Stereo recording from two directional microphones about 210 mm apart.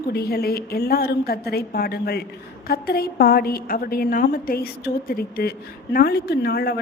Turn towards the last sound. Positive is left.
turn(degrees=50)  # may be behind; listen again after turning